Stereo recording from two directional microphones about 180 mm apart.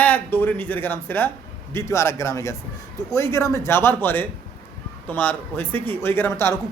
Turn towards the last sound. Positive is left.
turn(degrees=15)  # may be behind; listen again after turning